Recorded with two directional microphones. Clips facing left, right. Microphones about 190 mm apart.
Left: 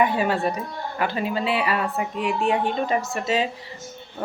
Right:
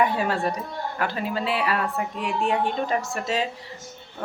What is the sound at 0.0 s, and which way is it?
Speech, 5° left (ahead or behind).